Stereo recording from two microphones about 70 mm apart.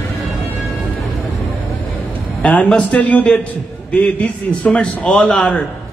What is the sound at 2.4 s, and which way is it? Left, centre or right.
A man's voice, centre.